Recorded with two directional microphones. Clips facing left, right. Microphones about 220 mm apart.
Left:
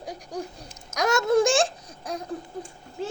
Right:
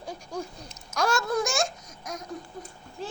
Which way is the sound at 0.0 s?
15° left (ahead or behind).